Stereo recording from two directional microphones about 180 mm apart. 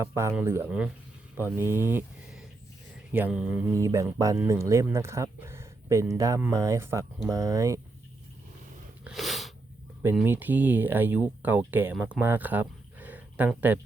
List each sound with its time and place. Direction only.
0.0 s speech: 15° right (ahead or behind)
9.0 s a sound: centre (ahead or behind)
10.2 s speech: 10° right (ahead or behind)